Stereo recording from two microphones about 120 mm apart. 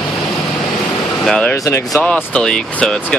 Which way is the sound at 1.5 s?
25° left (ahead or behind).